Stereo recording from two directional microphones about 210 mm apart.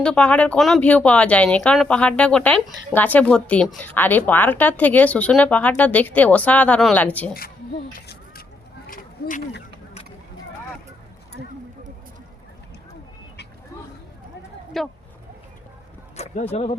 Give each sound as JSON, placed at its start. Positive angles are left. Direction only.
{"t": 0.0, "sound": "a woman's voice", "side_deg": 5}
{"t": 7.9, "sound": "a sound", "side_deg": 45}
{"t": 14.8, "sound": "speech", "side_deg": 0}
{"t": 16.1, "sound": "speech", "side_deg": 30}